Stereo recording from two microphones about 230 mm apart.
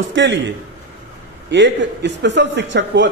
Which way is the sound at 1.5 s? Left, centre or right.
Right.